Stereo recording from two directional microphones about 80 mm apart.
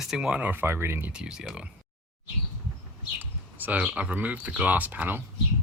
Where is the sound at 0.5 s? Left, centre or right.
Right.